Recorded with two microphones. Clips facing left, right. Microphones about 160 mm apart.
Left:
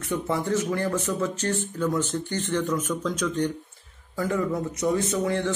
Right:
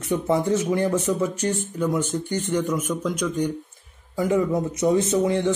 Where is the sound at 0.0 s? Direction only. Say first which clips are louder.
Right 5 dB; 20° right (ahead or behind).